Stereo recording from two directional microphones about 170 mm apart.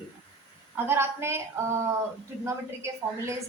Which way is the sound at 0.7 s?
15° right (ahead or behind).